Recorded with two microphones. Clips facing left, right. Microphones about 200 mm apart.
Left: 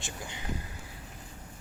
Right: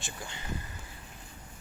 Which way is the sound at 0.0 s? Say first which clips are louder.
Left 1 dB; 15° left (ahead or behind).